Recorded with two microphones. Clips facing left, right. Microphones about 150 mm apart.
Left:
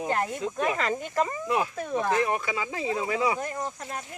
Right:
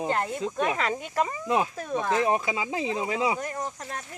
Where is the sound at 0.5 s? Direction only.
Centre (ahead or behind).